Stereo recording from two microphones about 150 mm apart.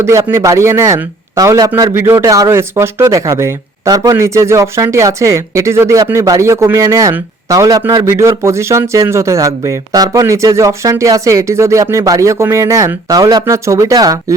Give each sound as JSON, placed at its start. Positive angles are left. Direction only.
{"t": 0.0, "sound": "a man's voice", "side_deg": -20}